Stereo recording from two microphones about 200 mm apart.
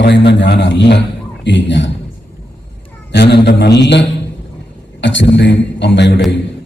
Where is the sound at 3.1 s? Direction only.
60° left (ahead or behind).